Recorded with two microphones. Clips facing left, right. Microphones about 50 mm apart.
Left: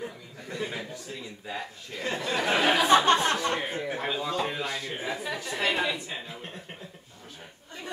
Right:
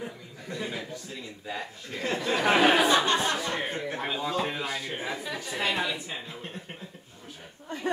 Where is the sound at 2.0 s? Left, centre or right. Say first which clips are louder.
Right 1 dB; centre.